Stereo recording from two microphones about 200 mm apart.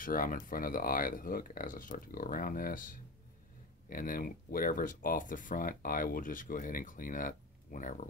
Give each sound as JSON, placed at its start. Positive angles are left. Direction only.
{"t": 0.0, "sound": "speech", "side_deg": 45}